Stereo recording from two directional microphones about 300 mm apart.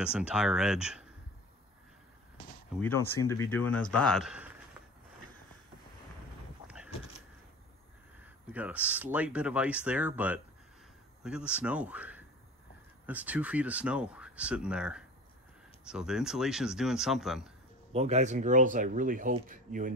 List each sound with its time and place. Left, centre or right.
0.0 s speech: centre
2.8 s speech: centre
8.5 s speech: centre
17.9 s speech: right